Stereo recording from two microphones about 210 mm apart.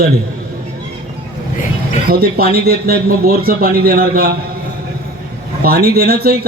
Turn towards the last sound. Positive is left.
turn(degrees=-45)  # may be behind; listen again after turning